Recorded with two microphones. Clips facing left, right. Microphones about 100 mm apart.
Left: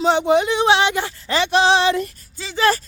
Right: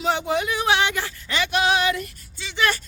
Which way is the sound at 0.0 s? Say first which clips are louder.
Left 7 dB; 25° left (ahead or behind).